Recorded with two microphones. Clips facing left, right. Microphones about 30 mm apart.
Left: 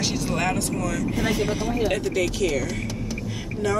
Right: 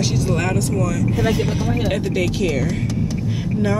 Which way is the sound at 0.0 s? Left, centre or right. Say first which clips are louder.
Right 4 dB; centre.